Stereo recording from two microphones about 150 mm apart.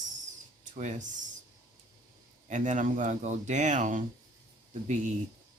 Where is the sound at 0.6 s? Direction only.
55° right (ahead or behind).